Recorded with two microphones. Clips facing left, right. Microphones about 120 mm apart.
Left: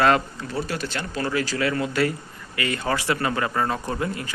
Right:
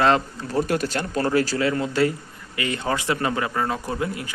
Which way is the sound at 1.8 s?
25° right (ahead or behind).